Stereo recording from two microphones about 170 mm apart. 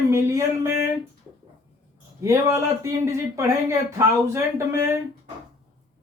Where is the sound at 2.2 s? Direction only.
15° right (ahead or behind).